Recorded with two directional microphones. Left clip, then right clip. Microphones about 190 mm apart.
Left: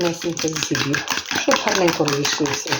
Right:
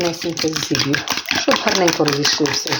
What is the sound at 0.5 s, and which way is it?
Speech, 10° right (ahead or behind).